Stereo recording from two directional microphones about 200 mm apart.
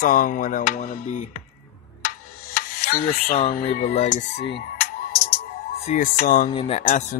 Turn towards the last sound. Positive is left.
turn(degrees=30)  # may be behind; listen again after turning